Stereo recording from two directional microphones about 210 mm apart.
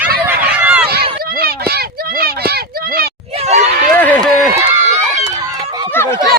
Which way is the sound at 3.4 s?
30° right (ahead or behind).